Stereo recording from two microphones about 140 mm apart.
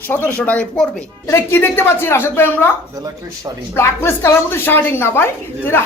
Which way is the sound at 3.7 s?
20° left (ahead or behind).